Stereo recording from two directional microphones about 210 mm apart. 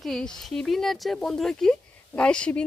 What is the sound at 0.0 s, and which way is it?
Speech, centre (ahead or behind).